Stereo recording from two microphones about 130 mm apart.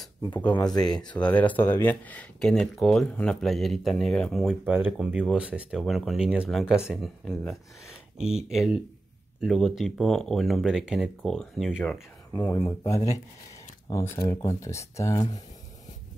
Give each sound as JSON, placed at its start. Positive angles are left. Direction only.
{"t": 0.4, "sound": "speech", "side_deg": 10}
{"t": 4.6, "sound": "speech", "side_deg": -15}
{"t": 4.9, "sound": "speech", "side_deg": -5}
{"t": 12.4, "sound": "speech", "side_deg": 20}